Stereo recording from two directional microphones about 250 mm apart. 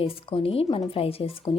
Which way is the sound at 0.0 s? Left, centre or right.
Left.